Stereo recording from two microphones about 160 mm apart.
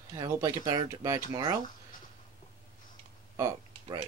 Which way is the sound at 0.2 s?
25° right (ahead or behind).